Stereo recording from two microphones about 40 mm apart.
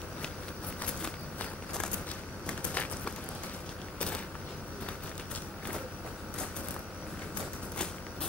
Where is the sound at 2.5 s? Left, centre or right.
Left.